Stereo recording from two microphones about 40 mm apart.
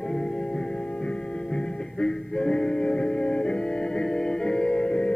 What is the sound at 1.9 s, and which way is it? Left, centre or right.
Music, centre.